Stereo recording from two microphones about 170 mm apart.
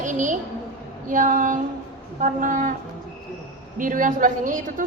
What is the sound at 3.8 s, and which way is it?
A woman's voice, 50° right (ahead or behind).